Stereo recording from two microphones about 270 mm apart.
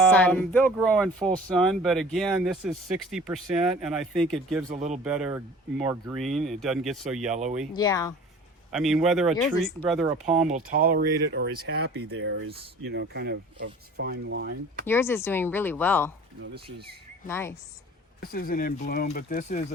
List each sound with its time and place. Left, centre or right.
0.1 s speech: centre
4.7 s speech: right
5.0 s speech: centre
7.8 s speech: centre
8.7 s speech: centre
10.5 s speech: right
14.8 s speech: centre
17.2 s speech: centre
18.2 s speech: left